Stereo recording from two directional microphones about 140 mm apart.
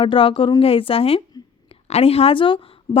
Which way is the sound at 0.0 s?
40° left (ahead or behind).